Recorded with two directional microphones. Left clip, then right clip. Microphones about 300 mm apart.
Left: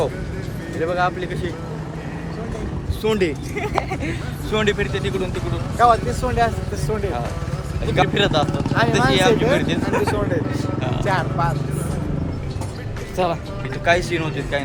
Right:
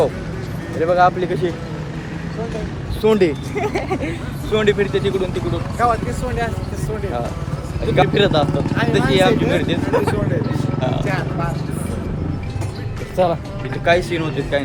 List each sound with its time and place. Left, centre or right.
0.8 s speech: centre
3.0 s speech: centre
5.7 s speech: centre
7.9 s speech: centre
11.1 s speech: centre
13.1 s speech: centre